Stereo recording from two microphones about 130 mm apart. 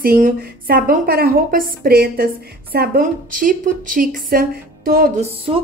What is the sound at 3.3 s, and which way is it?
A woman's voice, 90° right.